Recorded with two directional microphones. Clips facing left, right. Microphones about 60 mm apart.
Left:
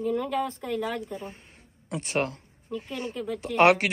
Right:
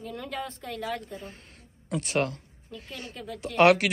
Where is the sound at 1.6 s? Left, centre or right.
Left.